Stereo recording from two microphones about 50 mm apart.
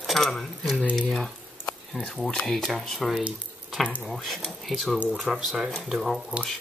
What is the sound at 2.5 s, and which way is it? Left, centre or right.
Speech, centre.